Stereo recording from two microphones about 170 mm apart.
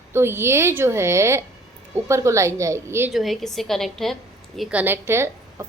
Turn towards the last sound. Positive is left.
turn(degrees=-15)  # may be behind; listen again after turning